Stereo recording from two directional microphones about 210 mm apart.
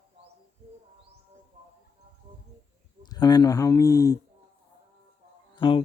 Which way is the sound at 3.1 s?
20° left (ahead or behind).